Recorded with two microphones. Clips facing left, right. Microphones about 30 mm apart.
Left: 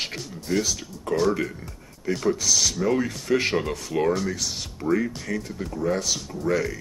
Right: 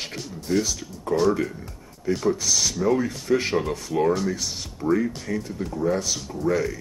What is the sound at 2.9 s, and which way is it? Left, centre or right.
Speech, left.